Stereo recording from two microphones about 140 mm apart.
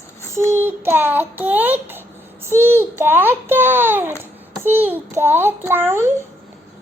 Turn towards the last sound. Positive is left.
turn(degrees=-20)  # may be behind; listen again after turning